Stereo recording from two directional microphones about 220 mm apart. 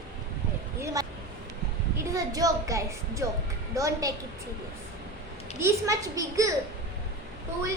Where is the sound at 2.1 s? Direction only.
15° right (ahead or behind).